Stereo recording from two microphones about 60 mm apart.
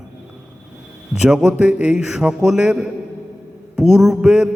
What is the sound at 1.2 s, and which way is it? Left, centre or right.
A man's voice, centre.